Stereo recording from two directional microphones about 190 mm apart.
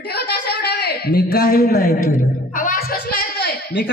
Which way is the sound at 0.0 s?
60° left (ahead or behind).